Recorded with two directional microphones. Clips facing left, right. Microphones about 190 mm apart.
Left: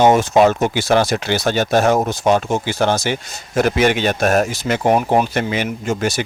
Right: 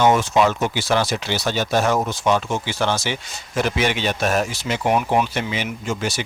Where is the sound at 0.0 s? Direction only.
45° left (ahead or behind).